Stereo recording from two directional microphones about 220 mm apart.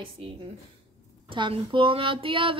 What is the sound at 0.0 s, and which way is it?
Speech, 25° right (ahead or behind).